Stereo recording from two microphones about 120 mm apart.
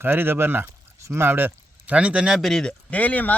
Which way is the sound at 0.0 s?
20° right (ahead or behind).